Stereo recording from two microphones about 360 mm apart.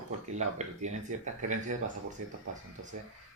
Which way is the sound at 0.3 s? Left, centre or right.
Centre.